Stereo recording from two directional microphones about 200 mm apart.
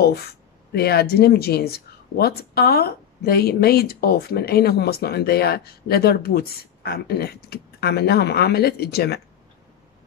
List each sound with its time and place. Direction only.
0.7 s speech: 55° left (ahead or behind)